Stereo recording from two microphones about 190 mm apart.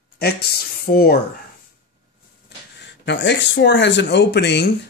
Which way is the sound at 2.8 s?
65° left (ahead or behind).